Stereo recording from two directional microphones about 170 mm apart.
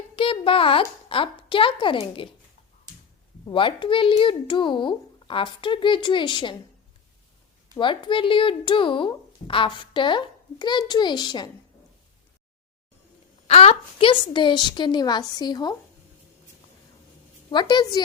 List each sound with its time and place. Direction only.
0.2 s a woman's voice: 30° left (ahead or behind)
3.4 s speech: 30° left (ahead or behind)
7.8 s speech: 30° left (ahead or behind)
13.5 s speech: 35° left (ahead or behind)
17.5 s speech: 25° left (ahead or behind)